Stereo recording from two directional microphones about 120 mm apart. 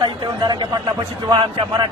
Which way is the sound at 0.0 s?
35° right (ahead or behind).